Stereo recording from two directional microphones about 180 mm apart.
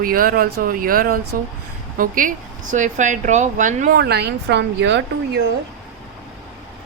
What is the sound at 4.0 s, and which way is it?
A woman's voice, 65° right (ahead or behind).